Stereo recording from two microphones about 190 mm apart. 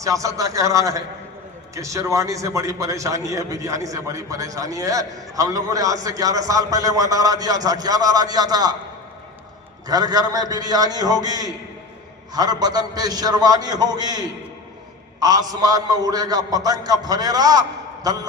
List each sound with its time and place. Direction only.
0.0 s a man's voice: 15° right (ahead or behind)
9.8 s a man's voice: 20° right (ahead or behind)